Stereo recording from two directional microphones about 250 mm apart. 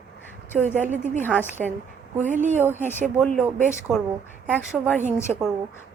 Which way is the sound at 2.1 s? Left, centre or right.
Right.